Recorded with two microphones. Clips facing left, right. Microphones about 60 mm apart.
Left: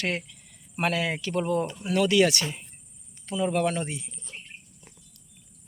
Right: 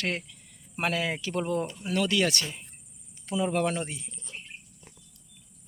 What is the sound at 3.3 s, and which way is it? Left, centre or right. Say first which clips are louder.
Speech: left 1 dB; centre.